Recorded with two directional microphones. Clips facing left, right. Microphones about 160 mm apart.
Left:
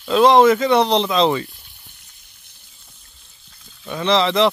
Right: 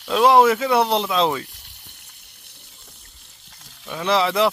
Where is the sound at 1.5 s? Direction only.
75° right (ahead or behind).